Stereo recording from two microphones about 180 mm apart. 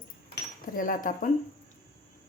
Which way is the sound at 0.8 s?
50° left (ahead or behind).